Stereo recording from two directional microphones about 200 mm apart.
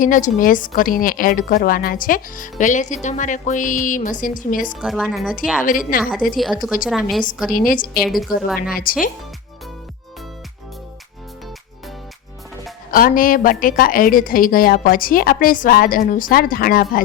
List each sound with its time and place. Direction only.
0.0 s a woman's voice: 40° left (ahead or behind)
4.8 s speech: centre (ahead or behind)
5.6 s a woman's voice: 45° left (ahead or behind)
6.3 s speech: centre (ahead or behind)
7.5 s a woman's voice: 45° left (ahead or behind)
8.0 s speech: centre (ahead or behind)
8.7 s a woman's voice: 45° left (ahead or behind)
12.9 s a woman's voice: 45° left (ahead or behind)